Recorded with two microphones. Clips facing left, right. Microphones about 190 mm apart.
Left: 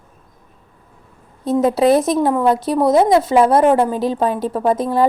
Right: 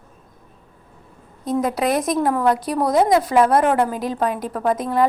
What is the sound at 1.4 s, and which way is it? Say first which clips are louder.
A woman's voice: left 6 dB; 30° left (ahead or behind).